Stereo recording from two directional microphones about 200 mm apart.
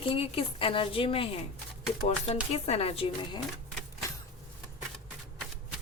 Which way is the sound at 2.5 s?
30° left (ahead or behind).